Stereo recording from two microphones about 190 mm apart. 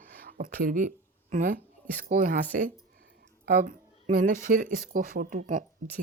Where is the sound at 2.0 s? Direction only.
45° right (ahead or behind).